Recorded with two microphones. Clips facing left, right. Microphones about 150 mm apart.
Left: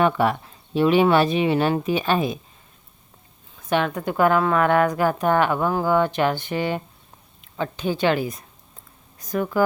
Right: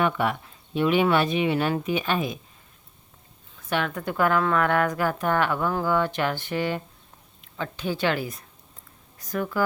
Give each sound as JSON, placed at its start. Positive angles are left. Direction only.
{"t": 0.0, "sound": "speech", "side_deg": 35}
{"t": 3.7, "sound": "speech", "side_deg": 20}